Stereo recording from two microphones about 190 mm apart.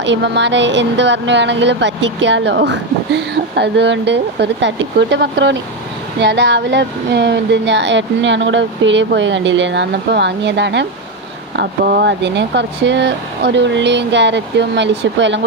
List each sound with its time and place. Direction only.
0.0 s speech: 70° right (ahead or behind)
11.5 s speech: 55° right (ahead or behind)